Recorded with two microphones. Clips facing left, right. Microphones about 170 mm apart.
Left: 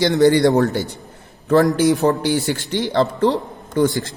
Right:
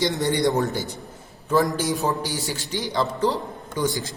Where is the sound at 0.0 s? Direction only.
75° left (ahead or behind); by 3.2 s 55° left (ahead or behind).